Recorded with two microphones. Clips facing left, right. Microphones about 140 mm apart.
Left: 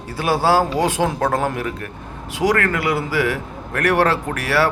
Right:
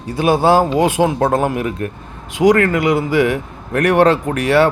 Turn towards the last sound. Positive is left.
turn(degrees=-20)  # may be behind; listen again after turning